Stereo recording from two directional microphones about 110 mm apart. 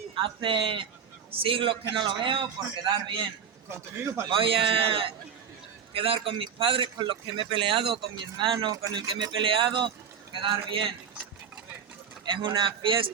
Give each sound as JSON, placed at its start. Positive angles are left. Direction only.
{"t": 0.4, "sound": "a man's voice", "side_deg": -50}
{"t": 3.7, "sound": "a man's voice", "side_deg": -20}
{"t": 4.3, "sound": "a man's voice", "side_deg": -55}
{"t": 12.2, "sound": "a man's voice", "side_deg": -45}